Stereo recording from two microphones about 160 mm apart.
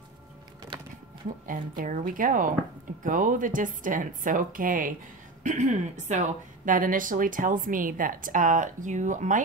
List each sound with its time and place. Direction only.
1.5 s a woman's voice: 55° right (ahead or behind)
5.4 s a woman's voice: 50° right (ahead or behind)